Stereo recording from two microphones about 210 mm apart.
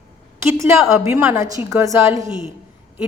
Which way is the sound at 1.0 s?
10° right (ahead or behind).